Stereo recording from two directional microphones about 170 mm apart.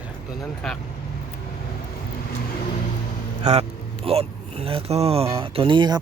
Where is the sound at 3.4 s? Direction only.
40° right (ahead or behind).